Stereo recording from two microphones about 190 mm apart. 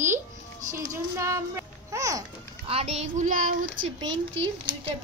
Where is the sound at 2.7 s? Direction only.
30° right (ahead or behind).